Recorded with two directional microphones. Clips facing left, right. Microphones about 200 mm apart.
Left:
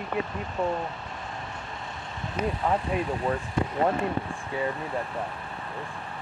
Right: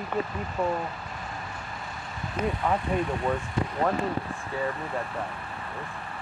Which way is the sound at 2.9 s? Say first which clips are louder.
Right 1 dB; 5° left (ahead or behind).